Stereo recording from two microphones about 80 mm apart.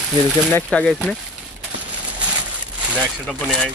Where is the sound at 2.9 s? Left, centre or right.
Centre.